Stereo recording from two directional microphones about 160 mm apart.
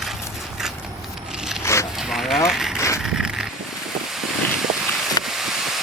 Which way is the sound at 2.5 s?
Centre (ahead or behind).